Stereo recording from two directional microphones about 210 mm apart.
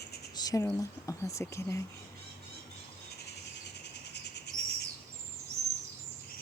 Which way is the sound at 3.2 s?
55° left (ahead or behind).